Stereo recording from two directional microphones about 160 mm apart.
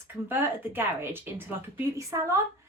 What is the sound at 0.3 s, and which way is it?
A woman's voice, 15° right (ahead or behind).